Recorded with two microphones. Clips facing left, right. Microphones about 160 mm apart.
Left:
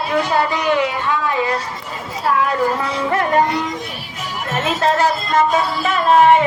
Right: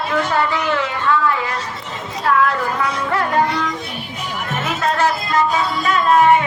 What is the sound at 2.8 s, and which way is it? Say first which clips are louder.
Speech: right 1 dB; 30° left (ahead or behind).